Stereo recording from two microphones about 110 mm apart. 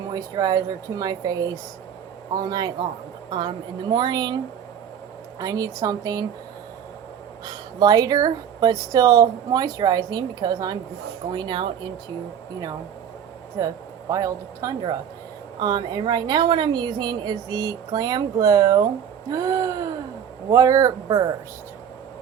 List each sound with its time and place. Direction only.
0.1 s a woman's voice: 35° right (ahead or behind)
5.4 s speech: 35° right (ahead or behind)
7.4 s a woman's voice: 35° right (ahead or behind)
13.6 s speech: 30° right (ahead or behind)